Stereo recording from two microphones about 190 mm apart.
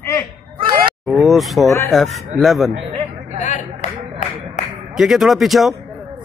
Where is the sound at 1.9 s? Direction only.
Centre (ahead or behind).